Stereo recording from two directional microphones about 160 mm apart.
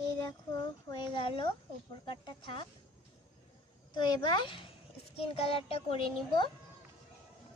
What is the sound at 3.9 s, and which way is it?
A child's voice, 30° left (ahead or behind).